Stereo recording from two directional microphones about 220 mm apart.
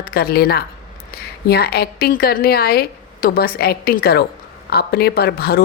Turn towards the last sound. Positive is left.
turn(degrees=45)  # may be behind; listen again after turning